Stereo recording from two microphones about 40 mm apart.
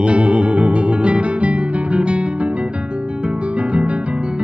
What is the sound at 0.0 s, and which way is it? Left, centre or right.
Music, right.